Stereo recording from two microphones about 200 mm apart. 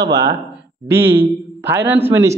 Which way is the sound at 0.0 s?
20° right (ahead or behind).